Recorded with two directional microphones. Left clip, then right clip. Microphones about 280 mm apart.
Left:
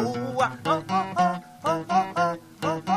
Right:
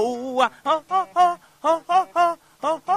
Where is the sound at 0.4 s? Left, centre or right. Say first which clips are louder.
Right 4 dB; right.